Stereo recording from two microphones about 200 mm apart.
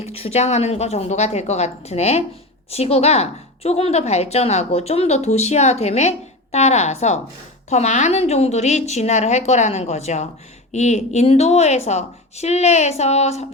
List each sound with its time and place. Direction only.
0.0 s a woman's voice: 30° left (ahead or behind)